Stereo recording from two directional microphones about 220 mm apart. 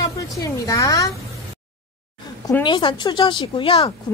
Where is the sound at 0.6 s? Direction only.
15° left (ahead or behind).